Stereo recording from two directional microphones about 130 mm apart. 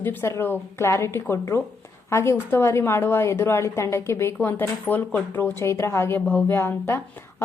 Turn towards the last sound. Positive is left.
turn(degrees=20)  # may be behind; listen again after turning